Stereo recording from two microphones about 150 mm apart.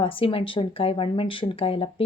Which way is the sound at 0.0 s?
35° left (ahead or behind).